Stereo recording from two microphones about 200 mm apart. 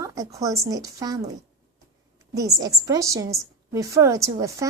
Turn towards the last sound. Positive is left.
turn(degrees=-15)  # may be behind; listen again after turning